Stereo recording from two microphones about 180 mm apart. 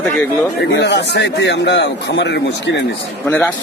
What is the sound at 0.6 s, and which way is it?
A man's voice, 80° left.